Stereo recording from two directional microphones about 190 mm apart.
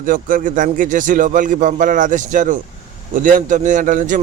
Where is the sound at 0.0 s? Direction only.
45° right (ahead or behind).